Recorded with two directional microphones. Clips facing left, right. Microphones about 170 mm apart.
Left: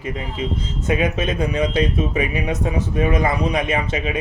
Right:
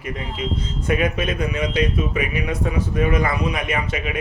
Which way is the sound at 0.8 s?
25° left (ahead or behind).